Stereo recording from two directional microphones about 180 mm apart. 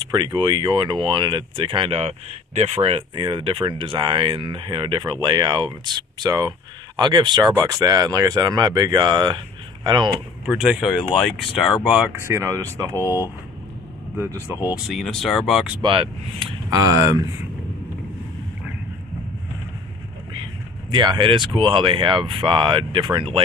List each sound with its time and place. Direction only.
0.1 s speech: 25° right (ahead or behind)
10.4 s speech: 5° right (ahead or behind)
12.1 s speech: 15° right (ahead or behind)
14.1 s speech: 15° right (ahead or behind)
14.9 s speech: centre (ahead or behind)
15.8 s speech: 30° right (ahead or behind)
20.9 s speech: 25° right (ahead or behind)